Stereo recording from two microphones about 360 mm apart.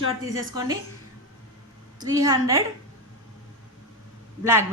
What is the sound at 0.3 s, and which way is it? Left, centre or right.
Speech, centre.